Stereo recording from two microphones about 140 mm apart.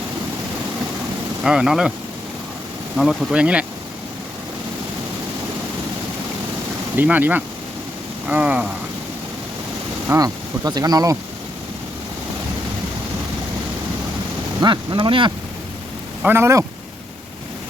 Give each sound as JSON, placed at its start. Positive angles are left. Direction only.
{"t": 1.5, "sound": "speech", "side_deg": -5}
{"t": 3.0, "sound": "speech", "side_deg": 0}
{"t": 6.9, "sound": "speech", "side_deg": -15}
{"t": 10.2, "sound": "speech", "side_deg": -25}
{"t": 14.6, "sound": "speech", "side_deg": -35}
{"t": 16.2, "sound": "speech", "side_deg": -15}